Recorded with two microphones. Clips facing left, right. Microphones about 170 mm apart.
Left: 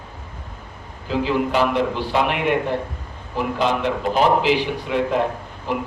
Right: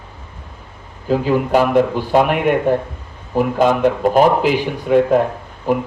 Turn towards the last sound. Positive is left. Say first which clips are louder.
# right 7 dB
turn(degrees=-45)  # may be behind; listen again after turning